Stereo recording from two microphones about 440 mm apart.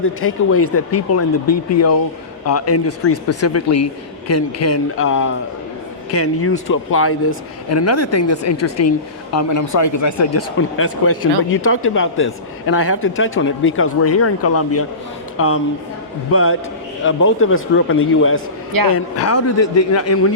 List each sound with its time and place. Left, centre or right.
0.0 s speech: left
18.7 s a man's voice: right
18.9 s speech: left